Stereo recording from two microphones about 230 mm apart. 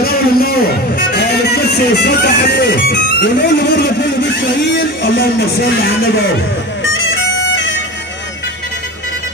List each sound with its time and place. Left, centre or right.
0.0 s music: left
4.7 s speech: left